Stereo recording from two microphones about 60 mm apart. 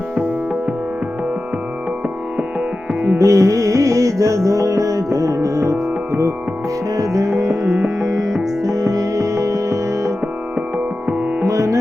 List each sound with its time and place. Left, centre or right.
3.2 s music: right
6.9 s music: right
8.0 s music: right
11.4 s music: right